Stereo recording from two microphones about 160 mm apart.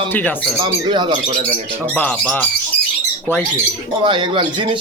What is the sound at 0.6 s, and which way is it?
Speech, 30° right (ahead or behind).